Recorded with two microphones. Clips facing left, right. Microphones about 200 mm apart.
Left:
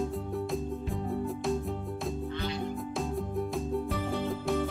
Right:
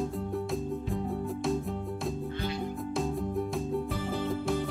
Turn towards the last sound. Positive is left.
turn(degrees=0)  # may be behind; listen again after turning